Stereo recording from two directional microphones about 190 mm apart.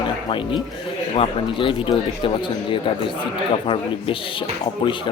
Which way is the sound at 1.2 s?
25° left (ahead or behind).